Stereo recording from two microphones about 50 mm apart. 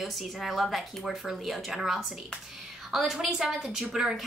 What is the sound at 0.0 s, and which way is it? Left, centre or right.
Speech, centre.